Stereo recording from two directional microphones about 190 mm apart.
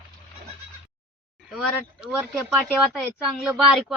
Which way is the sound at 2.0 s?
5° right (ahead or behind).